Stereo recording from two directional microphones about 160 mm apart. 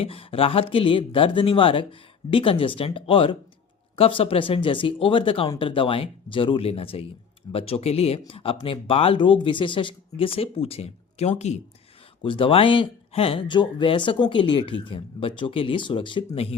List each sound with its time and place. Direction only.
0.0 s speech: 35° left (ahead or behind)
12.2 s speech: 30° left (ahead or behind)